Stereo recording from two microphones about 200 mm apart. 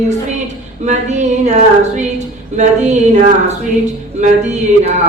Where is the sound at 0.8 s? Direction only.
35° right (ahead or behind).